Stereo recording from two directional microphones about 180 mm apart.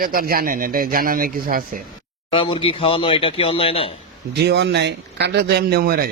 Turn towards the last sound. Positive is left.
turn(degrees=-55)  # may be behind; listen again after turning